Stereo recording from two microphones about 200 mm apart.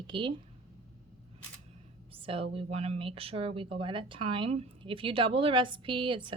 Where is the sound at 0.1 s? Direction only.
25° right (ahead or behind).